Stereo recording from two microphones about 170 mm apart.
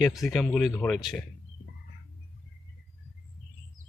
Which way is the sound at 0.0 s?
Centre (ahead or behind).